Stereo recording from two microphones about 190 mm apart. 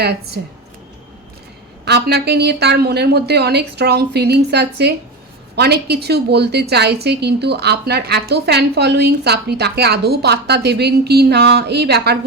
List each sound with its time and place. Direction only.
0.0 s a woman's voice: 60° right (ahead or behind)
1.8 s a woman's voice: 60° right (ahead or behind)